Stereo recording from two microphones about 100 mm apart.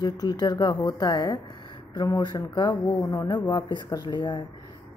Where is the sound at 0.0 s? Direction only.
40° left (ahead or behind).